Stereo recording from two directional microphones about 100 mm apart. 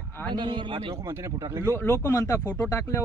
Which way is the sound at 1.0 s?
30° right (ahead or behind).